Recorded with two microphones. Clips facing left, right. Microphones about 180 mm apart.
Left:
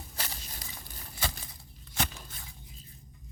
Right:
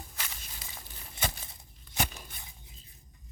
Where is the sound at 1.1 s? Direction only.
20° right (ahead or behind).